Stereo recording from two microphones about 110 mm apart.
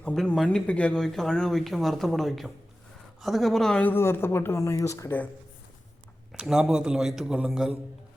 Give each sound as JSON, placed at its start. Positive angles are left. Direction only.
{"t": 0.0, "sound": "speech", "side_deg": 10}
{"t": 3.8, "sound": "speech", "side_deg": 20}
{"t": 6.3, "sound": "a man's voice", "side_deg": -5}